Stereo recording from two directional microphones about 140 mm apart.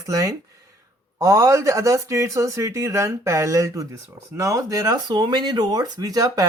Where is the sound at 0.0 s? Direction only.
25° right (ahead or behind).